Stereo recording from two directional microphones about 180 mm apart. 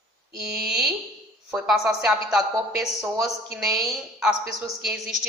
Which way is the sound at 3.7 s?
20° right (ahead or behind).